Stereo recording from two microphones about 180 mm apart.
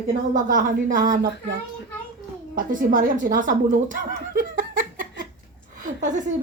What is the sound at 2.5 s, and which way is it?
A woman's voice, 50° right (ahead or behind).